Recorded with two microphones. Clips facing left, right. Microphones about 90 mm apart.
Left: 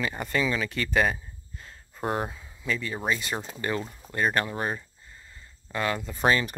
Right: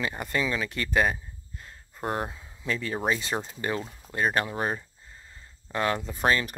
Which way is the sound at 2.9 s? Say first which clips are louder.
Right 4 dB; 20° right (ahead or behind).